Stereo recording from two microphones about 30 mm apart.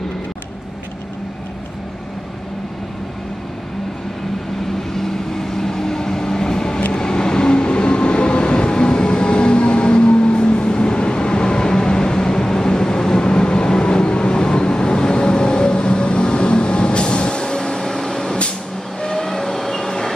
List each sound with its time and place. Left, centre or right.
4.9 s vehicle: centre
6.9 s train: left
18.9 s vehicle: left